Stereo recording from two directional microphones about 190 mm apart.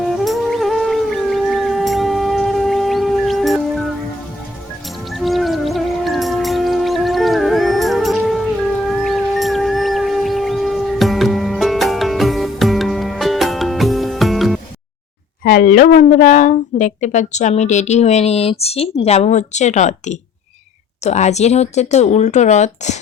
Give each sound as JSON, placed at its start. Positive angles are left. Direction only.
{"t": 0.0, "sound": "music", "side_deg": 0}
{"t": 5.0, "sound": "music", "side_deg": 0}
{"t": 15.4, "sound": "a woman's voice", "side_deg": 50}